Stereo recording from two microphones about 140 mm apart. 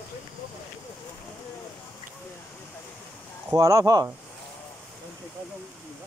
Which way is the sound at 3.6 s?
25° right (ahead or behind).